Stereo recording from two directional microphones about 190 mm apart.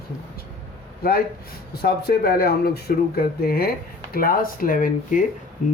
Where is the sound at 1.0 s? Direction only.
50° left (ahead or behind).